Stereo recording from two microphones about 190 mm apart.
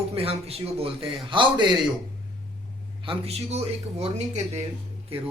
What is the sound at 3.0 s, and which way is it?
A man's voice, 30° right (ahead or behind).